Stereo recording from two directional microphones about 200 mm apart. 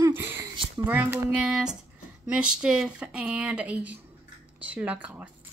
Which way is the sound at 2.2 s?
5° right (ahead or behind).